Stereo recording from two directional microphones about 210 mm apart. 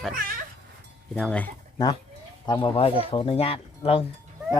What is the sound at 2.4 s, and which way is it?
Speech, 20° left (ahead or behind).